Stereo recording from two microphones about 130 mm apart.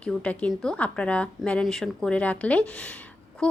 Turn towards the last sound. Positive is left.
turn(degrees=10)  # may be behind; listen again after turning